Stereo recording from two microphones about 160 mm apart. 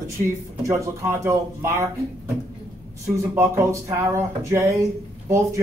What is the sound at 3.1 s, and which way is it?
A man's voice, 20° right (ahead or behind).